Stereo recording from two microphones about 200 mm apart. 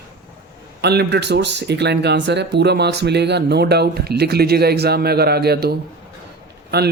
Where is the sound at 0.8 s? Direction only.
55° right (ahead or behind).